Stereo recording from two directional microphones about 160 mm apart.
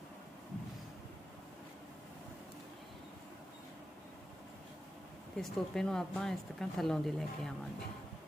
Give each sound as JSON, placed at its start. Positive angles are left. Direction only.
{"t": 5.4, "sound": "speech", "side_deg": 5}